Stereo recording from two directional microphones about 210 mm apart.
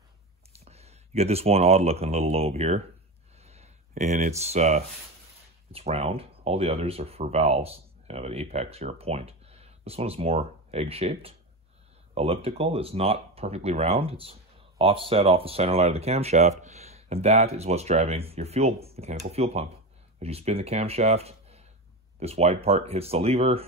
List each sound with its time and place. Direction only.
0.7 s speech: 30° right (ahead or behind)
3.3 s a sound: 30° right (ahead or behind)
3.9 s speech: 35° right (ahead or behind)